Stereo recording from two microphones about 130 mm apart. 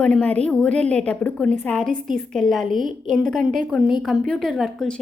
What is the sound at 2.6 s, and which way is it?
Speech, 90° right.